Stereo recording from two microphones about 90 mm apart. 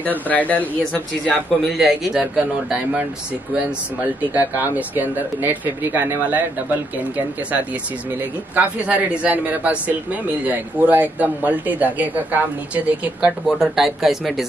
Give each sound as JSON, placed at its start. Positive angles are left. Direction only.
{"t": 0.0, "sound": "speech", "side_deg": 20}
{"t": 1.8, "sound": "speech", "side_deg": -10}
{"t": 4.3, "sound": "speech", "side_deg": -20}
{"t": 8.5, "sound": "speech", "side_deg": -15}
{"t": 13.5, "sound": "speech", "side_deg": -5}